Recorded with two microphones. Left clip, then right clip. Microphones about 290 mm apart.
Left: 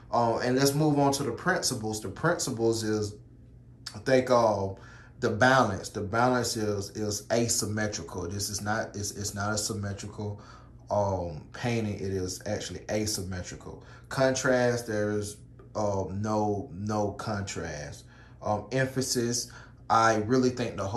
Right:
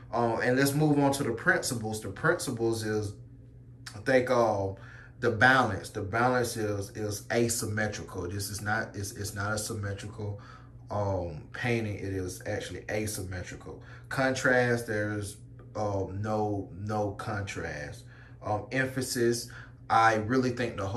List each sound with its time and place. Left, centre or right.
0.1 s speech: centre